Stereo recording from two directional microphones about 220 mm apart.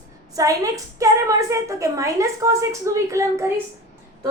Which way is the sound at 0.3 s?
15° right (ahead or behind).